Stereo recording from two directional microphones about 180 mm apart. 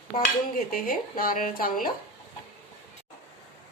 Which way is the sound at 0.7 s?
55° left (ahead or behind).